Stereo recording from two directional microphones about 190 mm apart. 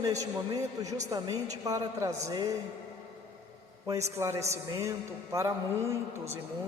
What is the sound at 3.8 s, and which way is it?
A man's voice, 15° right (ahead or behind).